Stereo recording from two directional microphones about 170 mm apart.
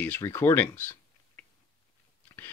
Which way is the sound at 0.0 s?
15° left (ahead or behind).